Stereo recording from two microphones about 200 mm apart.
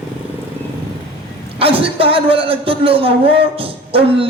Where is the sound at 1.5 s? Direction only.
30° right (ahead or behind).